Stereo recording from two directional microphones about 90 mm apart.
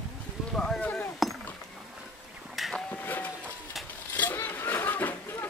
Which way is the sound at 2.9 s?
20° left (ahead or behind).